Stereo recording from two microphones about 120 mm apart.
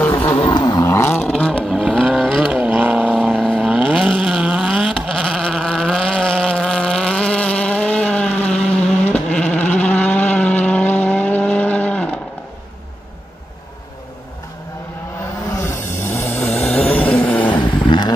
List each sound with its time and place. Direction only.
0.1 s a sound: 25° left (ahead or behind)
0.5 s vehicle: 35° left (ahead or behind)
0.8 s vehicle: 20° left (ahead or behind)
1.3 s vehicle: 5° left (ahead or behind)
2.5 s vehicle: 15° right (ahead or behind)
3.1 s vehicle: 5° left (ahead or behind)
3.7 s vehicle: 5° right (ahead or behind); by 12.2 s 10° left (ahead or behind)
15.5 s snoring: 20° left (ahead or behind)
16.6 s a sound: 5° left (ahead or behind)
17.5 s vehicle: 45° left (ahead or behind)